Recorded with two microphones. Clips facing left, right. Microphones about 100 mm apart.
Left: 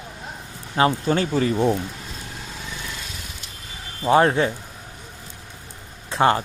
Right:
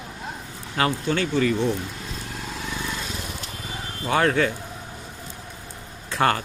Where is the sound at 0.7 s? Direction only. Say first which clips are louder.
Left 4 dB; 30° left (ahead or behind).